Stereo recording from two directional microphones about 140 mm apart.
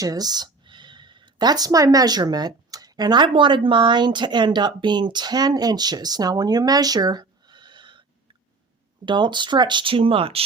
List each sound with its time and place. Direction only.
0.0 s speech: 25° right (ahead or behind)
9.0 s speech: 35° right (ahead or behind)